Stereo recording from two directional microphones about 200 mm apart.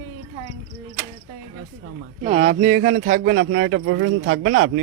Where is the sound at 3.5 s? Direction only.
70° right (ahead or behind).